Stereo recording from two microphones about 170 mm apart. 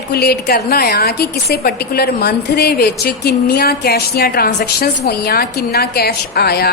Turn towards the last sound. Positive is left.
turn(degrees=70)  # may be behind; listen again after turning